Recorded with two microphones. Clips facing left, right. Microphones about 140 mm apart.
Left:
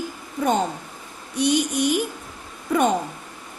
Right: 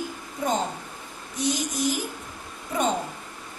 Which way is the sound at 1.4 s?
65° left (ahead or behind).